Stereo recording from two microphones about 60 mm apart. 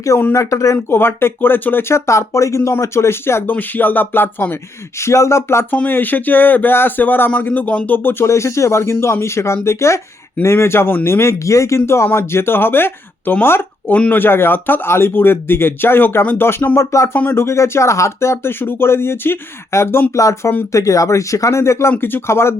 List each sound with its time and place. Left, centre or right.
0.3 s speech: left
0.9 s speech: left
3.5 s speech: left
4.5 s speech: left
5.9 s speech: left
12.1 s speech: left
16.7 s speech: left
18.6 s speech: left
20.1 s speech: left
21.9 s speech: left